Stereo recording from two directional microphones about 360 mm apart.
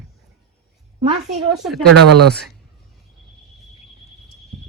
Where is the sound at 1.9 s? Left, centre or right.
Right.